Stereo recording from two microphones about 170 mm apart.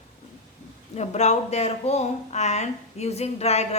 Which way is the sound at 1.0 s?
40° left (ahead or behind).